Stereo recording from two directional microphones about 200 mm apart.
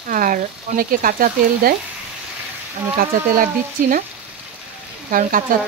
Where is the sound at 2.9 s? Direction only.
45° right (ahead or behind).